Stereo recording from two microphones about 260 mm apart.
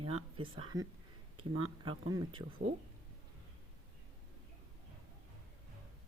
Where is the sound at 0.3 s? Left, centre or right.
Centre.